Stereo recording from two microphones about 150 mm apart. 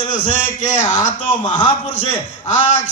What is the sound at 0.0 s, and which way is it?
A man's voice, 55° left (ahead or behind).